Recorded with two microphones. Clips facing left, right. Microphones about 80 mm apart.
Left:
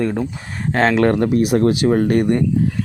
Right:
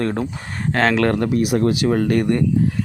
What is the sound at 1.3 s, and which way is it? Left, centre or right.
Speech, left.